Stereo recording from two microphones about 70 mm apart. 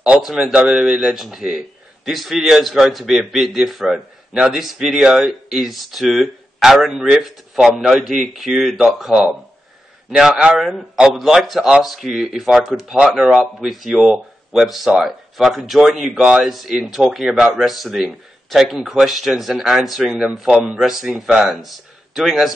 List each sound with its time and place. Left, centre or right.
0.2 s a man's voice: centre